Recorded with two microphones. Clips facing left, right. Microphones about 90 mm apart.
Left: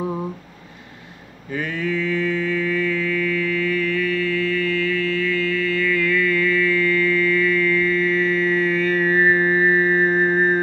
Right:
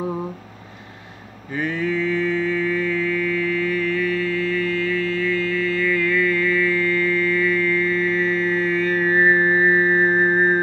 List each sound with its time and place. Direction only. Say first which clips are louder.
1.5 s mantra: right 1 dB; 20° right (ahead or behind)
2.3 s a sound: right 1 dB; 15° right (ahead or behind)
5.4 s mantra: even; 25° right (ahead or behind)